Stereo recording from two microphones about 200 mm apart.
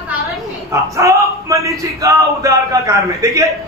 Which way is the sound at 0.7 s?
15° right (ahead or behind).